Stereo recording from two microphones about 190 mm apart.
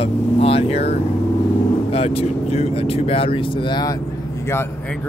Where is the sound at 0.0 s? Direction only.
30° left (ahead or behind).